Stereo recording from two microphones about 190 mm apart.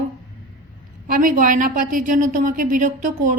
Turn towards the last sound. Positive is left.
turn(degrees=-40)  # may be behind; listen again after turning